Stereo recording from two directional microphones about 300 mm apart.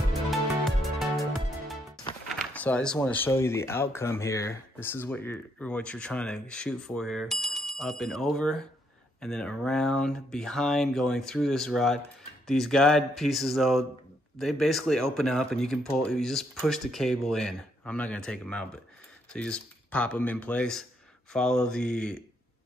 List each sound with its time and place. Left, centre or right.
0.3 s music: centre
2.2 s speech: centre